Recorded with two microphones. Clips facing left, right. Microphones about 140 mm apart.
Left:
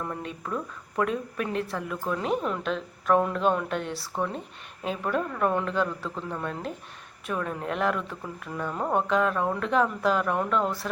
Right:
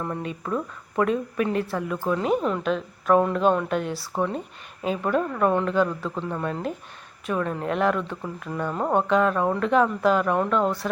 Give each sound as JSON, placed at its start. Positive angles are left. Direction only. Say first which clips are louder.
{"t": 0.0, "sound": "a woman's voice", "louder": "right 4 dB", "side_deg": -5}
{"t": 8.7, "sound": "a sound", "louder": "right 3 dB", "side_deg": -25}
{"t": 9.0, "sound": "a woman's voice", "louder": "right 4 dB", "side_deg": 0}